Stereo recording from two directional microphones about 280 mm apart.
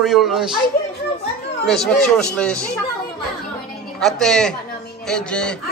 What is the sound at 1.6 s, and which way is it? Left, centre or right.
Speech, centre.